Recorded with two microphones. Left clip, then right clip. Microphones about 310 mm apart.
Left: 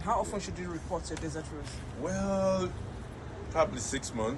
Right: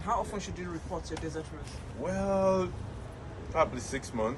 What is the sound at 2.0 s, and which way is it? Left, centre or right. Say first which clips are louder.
A man's voice: right 2 dB; right.